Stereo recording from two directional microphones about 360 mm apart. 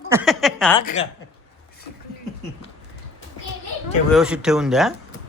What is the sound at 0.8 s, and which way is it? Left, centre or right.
Speech, centre.